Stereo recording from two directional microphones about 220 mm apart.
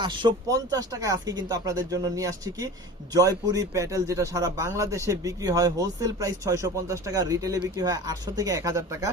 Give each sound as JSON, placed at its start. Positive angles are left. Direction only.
{"t": 0.0, "sound": "speech", "side_deg": -20}